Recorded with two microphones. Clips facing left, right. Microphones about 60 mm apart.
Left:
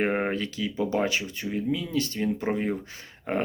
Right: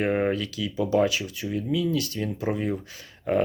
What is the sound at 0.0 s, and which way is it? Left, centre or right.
Speech, left.